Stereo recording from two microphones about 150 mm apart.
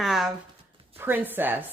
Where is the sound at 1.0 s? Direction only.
15° right (ahead or behind).